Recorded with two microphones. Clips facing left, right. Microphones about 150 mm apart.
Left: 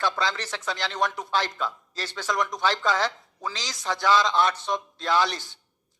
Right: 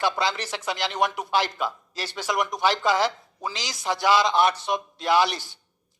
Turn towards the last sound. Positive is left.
turn(degrees=-10)  # may be behind; listen again after turning